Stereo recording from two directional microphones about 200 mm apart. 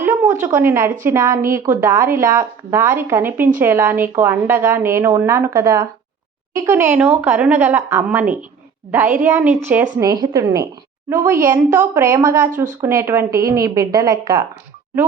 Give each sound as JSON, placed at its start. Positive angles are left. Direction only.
{"t": 0.0, "sound": "a woman's voice", "side_deg": -10}